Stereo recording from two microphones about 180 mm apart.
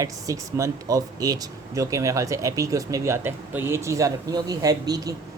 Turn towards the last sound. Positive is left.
turn(degrees=-20)  # may be behind; listen again after turning